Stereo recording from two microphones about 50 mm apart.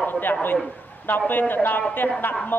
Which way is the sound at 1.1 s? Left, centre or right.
Left.